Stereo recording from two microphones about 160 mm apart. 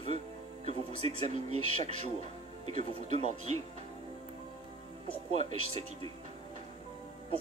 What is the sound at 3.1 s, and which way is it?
Speech, 45° right (ahead or behind).